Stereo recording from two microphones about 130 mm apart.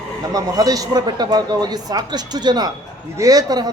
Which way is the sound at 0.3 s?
30° right (ahead or behind).